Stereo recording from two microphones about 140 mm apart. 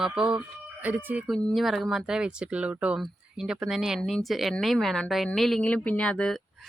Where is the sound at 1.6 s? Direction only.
Centre (ahead or behind).